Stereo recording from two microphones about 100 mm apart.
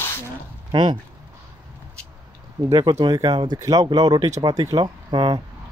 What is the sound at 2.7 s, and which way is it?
Speech, 40° right (ahead or behind).